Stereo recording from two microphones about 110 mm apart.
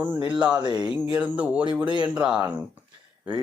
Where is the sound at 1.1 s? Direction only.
15° right (ahead or behind).